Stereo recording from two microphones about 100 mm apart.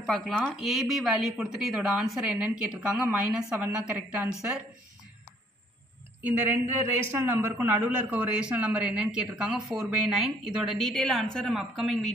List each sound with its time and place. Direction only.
0.0 s speech: centre (ahead or behind)
6.2 s a man's voice: 20° right (ahead or behind); by 12.0 s centre (ahead or behind)